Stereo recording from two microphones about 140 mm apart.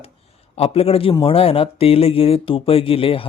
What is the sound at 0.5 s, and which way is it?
A man's voice, 45° left (ahead or behind).